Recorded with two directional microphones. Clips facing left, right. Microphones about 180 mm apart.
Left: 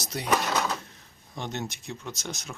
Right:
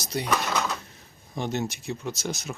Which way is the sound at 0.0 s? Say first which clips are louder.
Right 4 dB; centre (ahead or behind).